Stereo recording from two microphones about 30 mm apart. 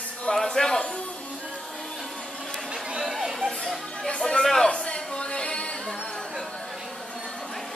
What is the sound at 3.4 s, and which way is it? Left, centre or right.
Music, centre.